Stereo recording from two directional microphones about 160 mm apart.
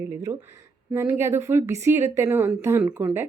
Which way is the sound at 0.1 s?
15° right (ahead or behind).